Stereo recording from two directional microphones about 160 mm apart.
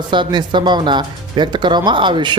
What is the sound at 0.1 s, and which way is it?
Speech, 30° right (ahead or behind).